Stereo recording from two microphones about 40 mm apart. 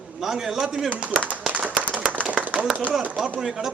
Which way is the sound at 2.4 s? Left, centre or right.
Right.